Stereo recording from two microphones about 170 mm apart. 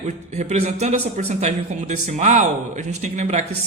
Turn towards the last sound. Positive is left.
turn(degrees=-45)  # may be behind; listen again after turning